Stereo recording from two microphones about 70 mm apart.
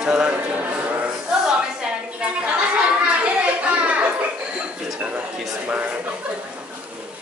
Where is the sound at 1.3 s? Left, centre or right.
Centre.